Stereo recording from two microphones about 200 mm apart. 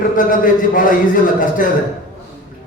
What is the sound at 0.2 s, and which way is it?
A man's voice, 40° left (ahead or behind).